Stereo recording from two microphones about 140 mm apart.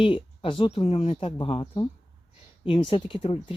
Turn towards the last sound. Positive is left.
turn(degrees=40)  # may be behind; listen again after turning